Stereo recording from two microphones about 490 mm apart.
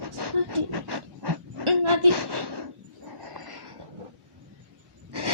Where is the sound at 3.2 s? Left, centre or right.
Right.